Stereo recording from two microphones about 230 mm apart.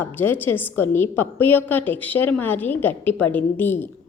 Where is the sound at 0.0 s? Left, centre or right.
Centre.